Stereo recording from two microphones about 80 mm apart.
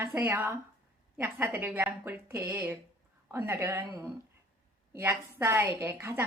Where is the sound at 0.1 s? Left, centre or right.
Right.